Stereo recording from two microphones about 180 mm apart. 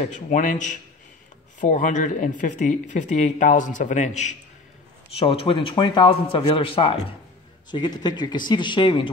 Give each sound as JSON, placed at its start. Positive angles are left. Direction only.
{"t": 0.0, "sound": "speech", "side_deg": 45}
{"t": 5.2, "sound": "speech", "side_deg": 30}